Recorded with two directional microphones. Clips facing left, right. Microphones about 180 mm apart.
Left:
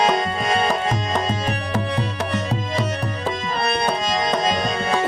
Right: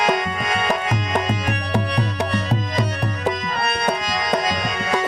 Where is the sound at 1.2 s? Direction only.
30° left (ahead or behind).